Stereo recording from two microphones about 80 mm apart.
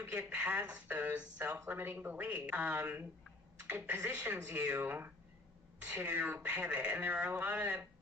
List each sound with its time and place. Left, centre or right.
0.0 s speech: right